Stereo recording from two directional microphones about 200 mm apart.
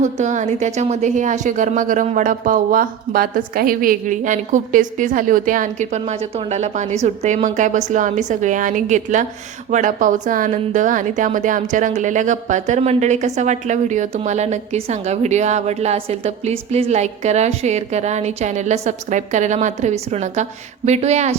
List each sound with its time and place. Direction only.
0.0 s a woman's voice: 35° right (ahead or behind)